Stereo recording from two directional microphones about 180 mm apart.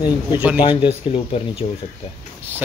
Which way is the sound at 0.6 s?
30° left (ahead or behind).